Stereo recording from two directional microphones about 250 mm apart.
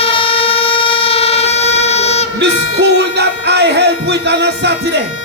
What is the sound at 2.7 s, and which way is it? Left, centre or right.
Music, right.